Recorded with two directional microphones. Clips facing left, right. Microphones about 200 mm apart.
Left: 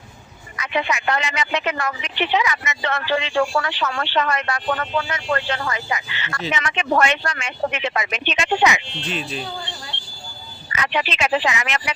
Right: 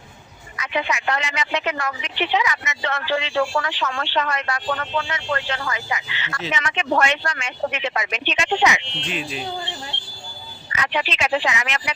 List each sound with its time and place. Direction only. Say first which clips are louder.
0.6 s speech: left 1 dB; 55° left (ahead or behind)
4.8 s speech: left 2 dB; 40° left (ahead or behind)
9.0 s speech: left 1 dB; 10° right (ahead or behind)
10.8 s speech: left 1 dB; 55° left (ahead or behind)